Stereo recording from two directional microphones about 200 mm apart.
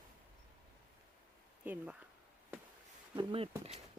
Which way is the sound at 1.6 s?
10° right (ahead or behind).